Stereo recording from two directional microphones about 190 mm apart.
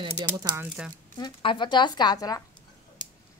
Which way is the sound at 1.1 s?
25° left (ahead or behind).